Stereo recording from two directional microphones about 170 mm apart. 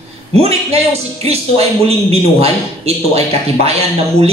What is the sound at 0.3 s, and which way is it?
A man's voice, 35° right (ahead or behind).